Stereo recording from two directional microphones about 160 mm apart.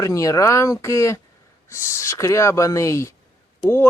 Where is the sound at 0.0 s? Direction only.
20° left (ahead or behind).